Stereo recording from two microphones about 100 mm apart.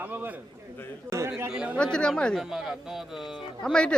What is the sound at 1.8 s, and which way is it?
Speech, 10° left (ahead or behind).